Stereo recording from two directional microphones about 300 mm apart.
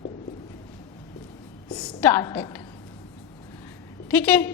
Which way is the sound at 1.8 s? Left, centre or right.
Centre.